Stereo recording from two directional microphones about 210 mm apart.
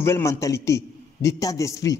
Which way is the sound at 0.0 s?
15° left (ahead or behind).